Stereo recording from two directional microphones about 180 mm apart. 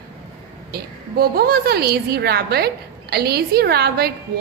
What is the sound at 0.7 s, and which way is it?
A woman's voice, 60° right (ahead or behind).